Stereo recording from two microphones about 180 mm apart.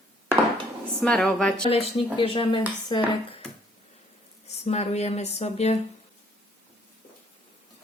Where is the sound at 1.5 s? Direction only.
35° left (ahead or behind).